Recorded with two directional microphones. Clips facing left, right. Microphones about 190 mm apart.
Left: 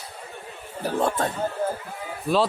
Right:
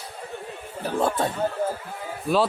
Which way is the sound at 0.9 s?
Centre (ahead or behind).